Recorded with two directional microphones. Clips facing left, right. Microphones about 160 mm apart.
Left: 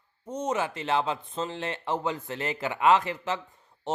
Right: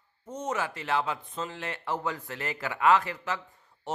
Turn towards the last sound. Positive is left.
turn(degrees=20)  # may be behind; listen again after turning